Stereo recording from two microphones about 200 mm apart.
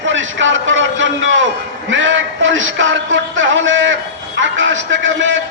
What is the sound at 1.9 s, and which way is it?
A man's voice, 70° right (ahead or behind).